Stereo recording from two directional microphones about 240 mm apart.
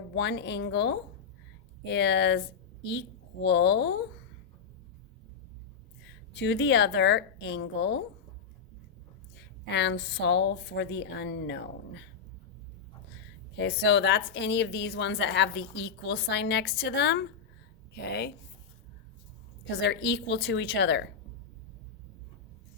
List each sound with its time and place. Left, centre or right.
0.1 s a woman's voice: left
3.4 s a woman's voice: left
6.3 s a woman's voice: left
9.6 s a woman's voice: left
13.6 s a woman's voice: left
19.7 s a woman's voice: left